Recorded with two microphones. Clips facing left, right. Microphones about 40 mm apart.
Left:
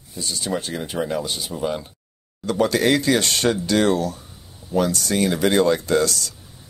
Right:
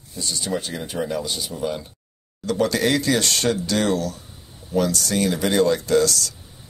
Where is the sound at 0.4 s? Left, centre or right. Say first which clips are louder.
Left 2 dB; centre.